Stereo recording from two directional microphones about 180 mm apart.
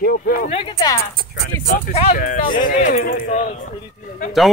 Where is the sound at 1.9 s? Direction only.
35° left (ahead or behind).